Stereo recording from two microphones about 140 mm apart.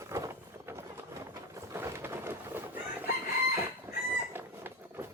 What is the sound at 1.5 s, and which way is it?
Chicken, 20° right (ahead or behind).